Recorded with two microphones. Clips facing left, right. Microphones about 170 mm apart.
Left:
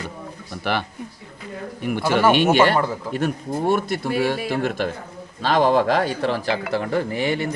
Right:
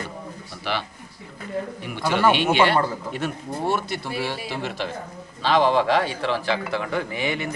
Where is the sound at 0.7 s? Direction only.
50° left (ahead or behind).